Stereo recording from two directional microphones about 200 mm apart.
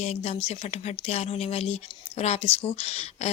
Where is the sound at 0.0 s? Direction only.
35° left (ahead or behind).